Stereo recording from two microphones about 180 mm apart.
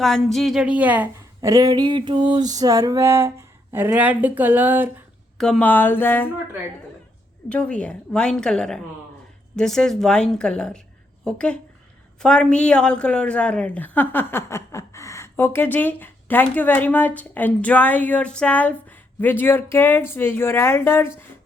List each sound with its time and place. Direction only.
0.0 s a woman's voice: centre (ahead or behind)
5.4 s a woman's voice: 5° left (ahead or behind)
7.5 s a woman's voice: 5° left (ahead or behind)